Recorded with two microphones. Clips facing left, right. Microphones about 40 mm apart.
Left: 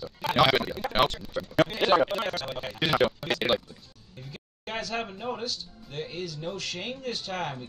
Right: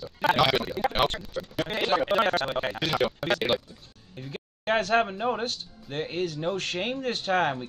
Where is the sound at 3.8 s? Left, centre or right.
Right.